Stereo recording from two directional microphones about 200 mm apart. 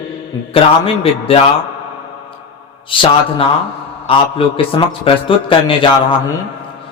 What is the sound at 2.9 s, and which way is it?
Speech, 25° left (ahead or behind).